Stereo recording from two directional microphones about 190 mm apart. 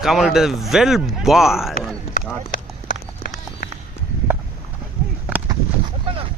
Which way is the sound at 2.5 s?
45° left (ahead or behind).